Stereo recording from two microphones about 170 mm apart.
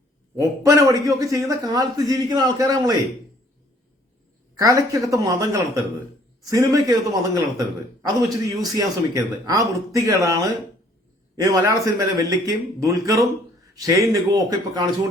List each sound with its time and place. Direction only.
0.3 s a man's voice: 20° right (ahead or behind)
4.5 s a man's voice: 20° right (ahead or behind)
11.3 s a man's voice: 20° right (ahead or behind)